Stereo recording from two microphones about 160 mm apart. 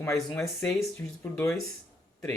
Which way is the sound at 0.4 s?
15° left (ahead or behind).